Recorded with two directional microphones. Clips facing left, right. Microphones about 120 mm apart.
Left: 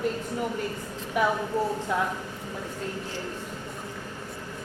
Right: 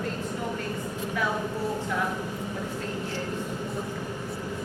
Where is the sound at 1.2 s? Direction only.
20° left (ahead or behind).